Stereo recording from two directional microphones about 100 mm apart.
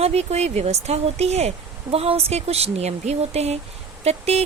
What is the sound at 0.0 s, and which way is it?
Speech, 90° right.